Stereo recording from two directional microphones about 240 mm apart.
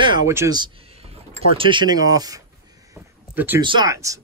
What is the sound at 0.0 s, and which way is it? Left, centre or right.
Speech, centre.